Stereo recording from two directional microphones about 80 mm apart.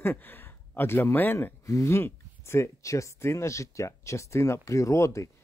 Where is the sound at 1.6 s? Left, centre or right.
Left.